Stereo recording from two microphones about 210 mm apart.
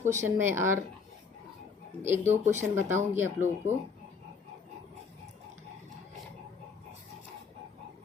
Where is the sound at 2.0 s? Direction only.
10° right (ahead or behind).